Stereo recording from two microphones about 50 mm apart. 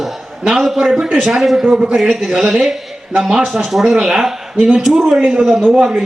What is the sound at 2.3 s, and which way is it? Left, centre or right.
Speech, centre.